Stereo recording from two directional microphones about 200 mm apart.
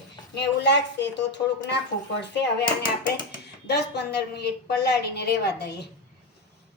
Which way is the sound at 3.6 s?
55° left (ahead or behind).